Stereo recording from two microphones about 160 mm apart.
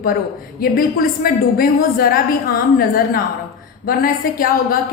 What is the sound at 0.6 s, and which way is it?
A woman's voice, 65° left (ahead or behind).